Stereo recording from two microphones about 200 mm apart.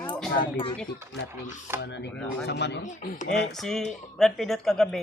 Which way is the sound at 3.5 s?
Centre (ahead or behind).